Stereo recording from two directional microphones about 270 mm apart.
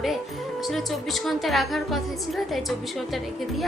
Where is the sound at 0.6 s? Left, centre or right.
Centre.